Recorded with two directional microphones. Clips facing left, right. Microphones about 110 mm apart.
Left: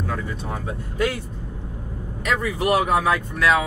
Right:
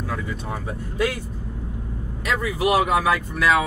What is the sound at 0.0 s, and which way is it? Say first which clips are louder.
Speech: left 1 dB; centre (ahead or behind).